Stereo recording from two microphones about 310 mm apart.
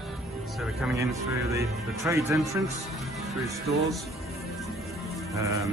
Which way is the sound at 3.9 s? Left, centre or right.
Centre.